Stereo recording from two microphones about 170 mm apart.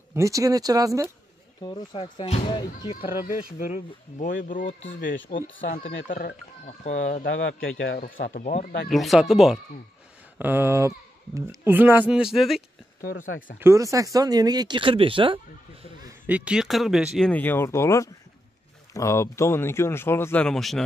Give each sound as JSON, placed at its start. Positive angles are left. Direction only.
{"t": 0.1, "sound": "speech", "side_deg": -20}
{"t": 1.6, "sound": "speech", "side_deg": 25}
{"t": 2.2, "sound": "speech", "side_deg": 35}
{"t": 3.0, "sound": "speech", "side_deg": 55}
{"t": 7.2, "sound": "a man's voice", "side_deg": 90}
{"t": 8.0, "sound": "speech", "side_deg": 55}
{"t": 8.9, "sound": "speech", "side_deg": 0}
{"t": 10.4, "sound": "speech", "side_deg": -15}
{"t": 13.0, "sound": "speech", "side_deg": 55}
{"t": 13.6, "sound": "speech", "side_deg": -15}
{"t": 16.3, "sound": "speech", "side_deg": -5}
{"t": 17.3, "sound": "speech", "side_deg": 10}